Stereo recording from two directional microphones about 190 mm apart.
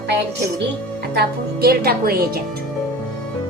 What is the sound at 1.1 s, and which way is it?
Speech, 55° right (ahead or behind).